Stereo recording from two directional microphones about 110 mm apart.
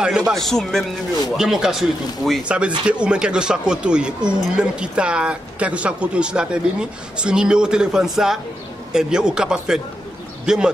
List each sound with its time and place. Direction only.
0.3 s speech: centre (ahead or behind)